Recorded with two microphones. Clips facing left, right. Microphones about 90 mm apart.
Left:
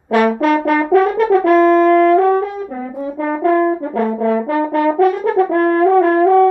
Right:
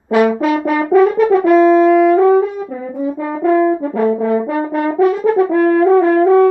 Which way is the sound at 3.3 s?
55° left (ahead or behind).